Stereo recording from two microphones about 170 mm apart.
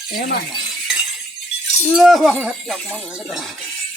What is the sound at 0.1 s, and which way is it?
Speech, 65° left (ahead or behind).